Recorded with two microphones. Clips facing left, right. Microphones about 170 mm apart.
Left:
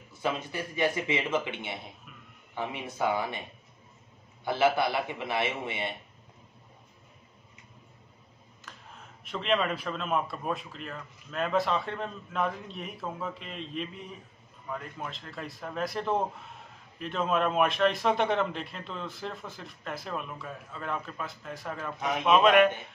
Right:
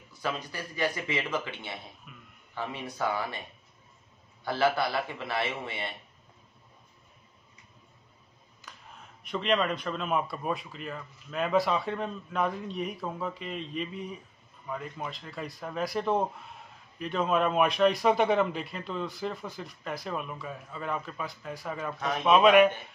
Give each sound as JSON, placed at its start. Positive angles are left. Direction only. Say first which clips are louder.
{"t": 0.1, "sound": "a man's voice", "louder": "left 2 dB", "side_deg": 20}
{"t": 4.5, "sound": "a man's voice", "louder": "left 1 dB", "side_deg": 20}
{"t": 8.7, "sound": "a sound", "louder": "left 1 dB", "side_deg": 0}
{"t": 9.3, "sound": "speech", "louder": "right 1 dB", "side_deg": 0}